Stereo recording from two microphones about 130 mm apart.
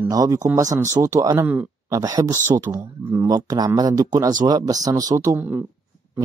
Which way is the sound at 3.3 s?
30° right (ahead or behind).